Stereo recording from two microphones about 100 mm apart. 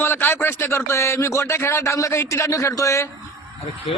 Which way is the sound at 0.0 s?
20° left (ahead or behind).